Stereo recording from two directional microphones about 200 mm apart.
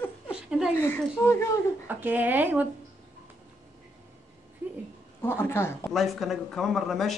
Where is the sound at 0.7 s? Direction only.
10° left (ahead or behind).